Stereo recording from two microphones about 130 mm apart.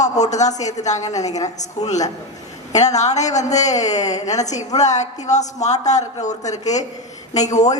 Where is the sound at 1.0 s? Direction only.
25° left (ahead or behind).